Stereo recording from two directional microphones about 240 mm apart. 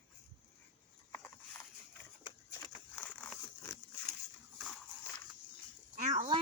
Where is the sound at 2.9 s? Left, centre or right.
Centre.